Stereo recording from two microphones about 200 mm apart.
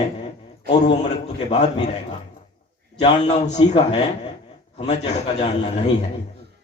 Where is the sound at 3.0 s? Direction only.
35° left (ahead or behind).